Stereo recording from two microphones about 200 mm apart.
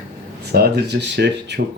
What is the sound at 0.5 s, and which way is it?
Speech, 55° right (ahead or behind).